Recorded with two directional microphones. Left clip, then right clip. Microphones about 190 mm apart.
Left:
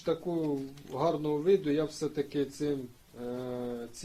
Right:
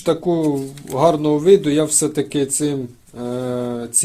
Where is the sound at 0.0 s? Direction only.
40° right (ahead or behind).